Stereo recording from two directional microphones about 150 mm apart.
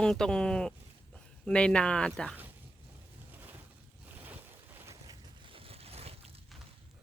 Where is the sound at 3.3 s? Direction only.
10° right (ahead or behind).